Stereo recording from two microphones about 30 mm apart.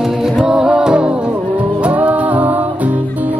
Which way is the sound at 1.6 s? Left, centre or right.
Right.